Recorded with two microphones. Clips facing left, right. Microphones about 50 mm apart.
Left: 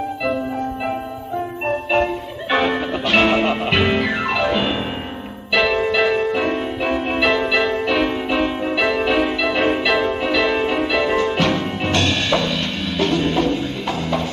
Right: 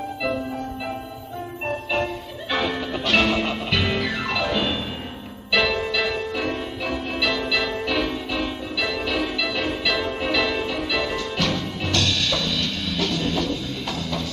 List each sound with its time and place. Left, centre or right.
1.7 s music: left